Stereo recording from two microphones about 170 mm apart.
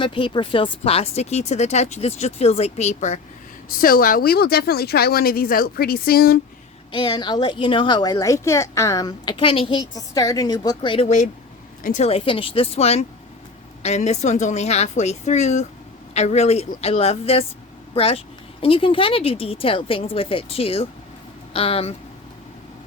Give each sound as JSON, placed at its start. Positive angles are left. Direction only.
{"t": 0.0, "sound": "speech", "side_deg": 30}
{"t": 3.7, "sound": "speech", "side_deg": 60}
{"t": 6.9, "sound": "a woman's voice", "side_deg": 25}